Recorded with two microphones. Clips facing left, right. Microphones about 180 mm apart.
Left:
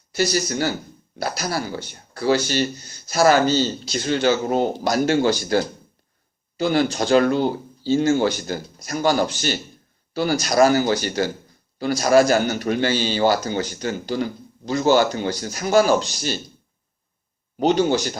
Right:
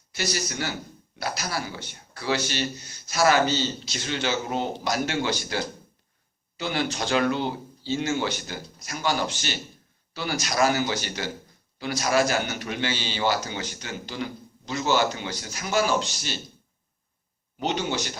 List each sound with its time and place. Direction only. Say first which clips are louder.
0.1 s a man's voice: left 8 dB; 40° left (ahead or behind)
14.8 s speech: left 7 dB; 50° left (ahead or behind)
17.6 s a man's voice: left 9 dB; 40° left (ahead or behind)